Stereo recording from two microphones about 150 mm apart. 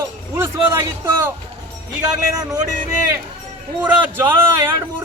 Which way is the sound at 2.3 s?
25° right (ahead or behind).